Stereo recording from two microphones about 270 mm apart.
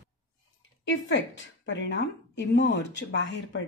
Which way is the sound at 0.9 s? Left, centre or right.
Left.